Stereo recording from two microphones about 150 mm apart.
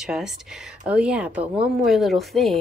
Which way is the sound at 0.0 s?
5° right (ahead or behind).